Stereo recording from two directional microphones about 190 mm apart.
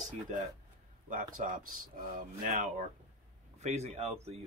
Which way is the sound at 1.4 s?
45° right (ahead or behind).